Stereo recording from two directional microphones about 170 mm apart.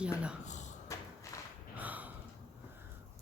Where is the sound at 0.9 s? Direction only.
20° left (ahead or behind).